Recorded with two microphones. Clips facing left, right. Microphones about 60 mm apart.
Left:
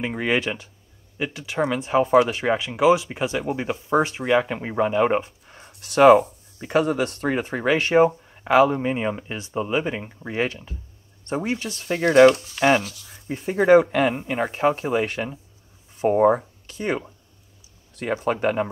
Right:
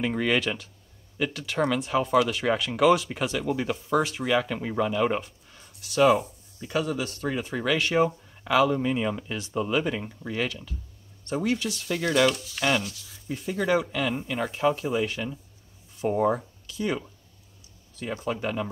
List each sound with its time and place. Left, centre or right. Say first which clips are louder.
0.0 s speech: left 2 dB; left
18.2 s speech: left 7 dB; left